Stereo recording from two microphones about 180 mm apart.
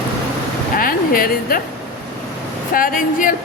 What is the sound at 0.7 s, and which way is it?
Speech, 50° left (ahead or behind).